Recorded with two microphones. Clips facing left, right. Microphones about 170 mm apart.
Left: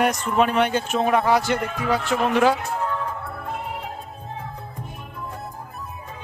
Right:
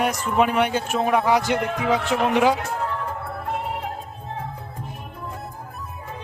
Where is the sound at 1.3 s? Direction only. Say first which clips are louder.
Even; 15° right (ahead or behind).